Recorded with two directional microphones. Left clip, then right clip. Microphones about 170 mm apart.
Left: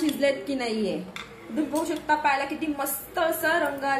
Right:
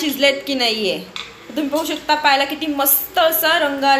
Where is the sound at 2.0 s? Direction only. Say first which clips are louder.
Right 9 dB; 20° right (ahead or behind).